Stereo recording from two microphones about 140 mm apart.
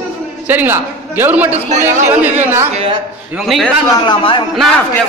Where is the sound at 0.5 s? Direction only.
15° right (ahead or behind).